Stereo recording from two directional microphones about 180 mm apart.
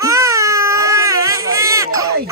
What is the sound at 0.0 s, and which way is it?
Baby cry, 20° right (ahead or behind).